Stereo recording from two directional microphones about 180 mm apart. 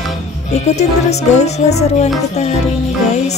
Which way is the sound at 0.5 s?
40° left (ahead or behind).